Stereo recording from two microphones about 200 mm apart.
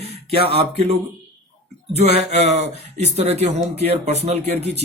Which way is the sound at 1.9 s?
30° right (ahead or behind).